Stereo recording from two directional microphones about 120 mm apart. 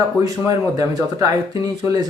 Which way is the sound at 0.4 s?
30° right (ahead or behind).